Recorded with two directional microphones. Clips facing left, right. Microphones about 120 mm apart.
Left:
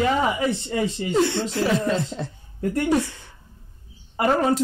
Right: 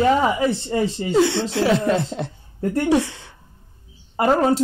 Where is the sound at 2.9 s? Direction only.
90° right.